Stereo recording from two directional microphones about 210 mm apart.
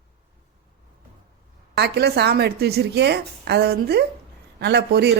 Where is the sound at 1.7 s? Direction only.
50° right (ahead or behind).